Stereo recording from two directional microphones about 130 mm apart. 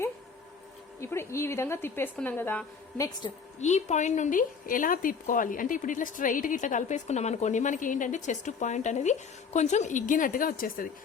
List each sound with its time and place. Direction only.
1.0 s a woman's voice: 20° left (ahead or behind)
3.6 s a woman's voice: 60° left (ahead or behind); by 10.8 s 90° left